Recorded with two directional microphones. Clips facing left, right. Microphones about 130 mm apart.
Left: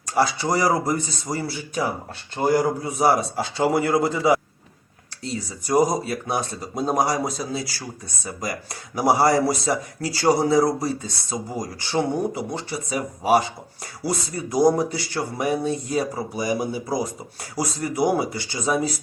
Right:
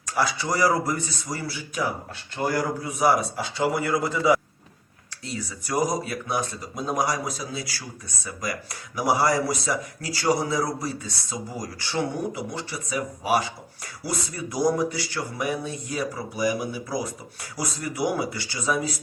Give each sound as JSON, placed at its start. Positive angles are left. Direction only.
{"t": 0.0, "sound": "speech", "side_deg": 30}